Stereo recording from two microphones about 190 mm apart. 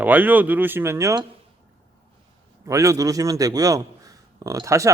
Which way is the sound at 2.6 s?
15° right (ahead or behind).